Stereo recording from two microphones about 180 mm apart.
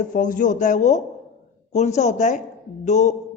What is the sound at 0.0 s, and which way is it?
A woman's voice, 45° left (ahead or behind).